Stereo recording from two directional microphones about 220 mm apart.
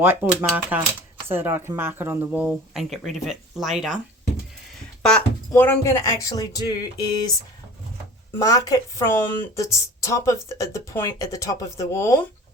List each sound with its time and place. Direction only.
0.0 s speech: 10° right (ahead or behind)
5.0 s speech: 5° left (ahead or behind)
8.4 s a woman's voice: 15° left (ahead or behind)